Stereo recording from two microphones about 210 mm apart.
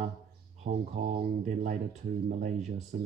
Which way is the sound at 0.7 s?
40° right (ahead or behind).